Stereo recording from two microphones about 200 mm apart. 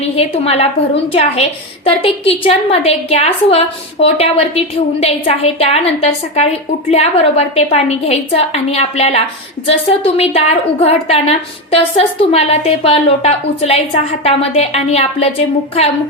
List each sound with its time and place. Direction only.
0.2 s a woman's voice: 30° left (ahead or behind)